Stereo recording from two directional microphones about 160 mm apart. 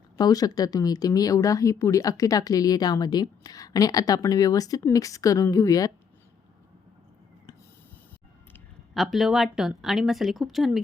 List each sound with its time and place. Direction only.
0.2 s speech: 25° left (ahead or behind)
9.0 s a woman's voice: centre (ahead or behind)